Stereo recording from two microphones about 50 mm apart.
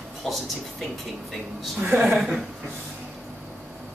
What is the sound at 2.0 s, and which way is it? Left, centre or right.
Speech, centre.